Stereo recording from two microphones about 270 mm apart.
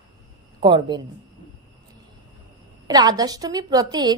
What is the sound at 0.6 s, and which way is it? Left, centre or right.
Speech, centre.